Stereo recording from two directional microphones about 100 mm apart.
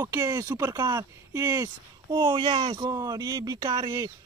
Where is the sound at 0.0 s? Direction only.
35° right (ahead or behind).